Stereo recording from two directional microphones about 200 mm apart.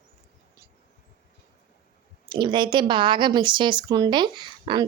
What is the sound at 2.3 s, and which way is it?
A woman's voice, 25° right (ahead or behind).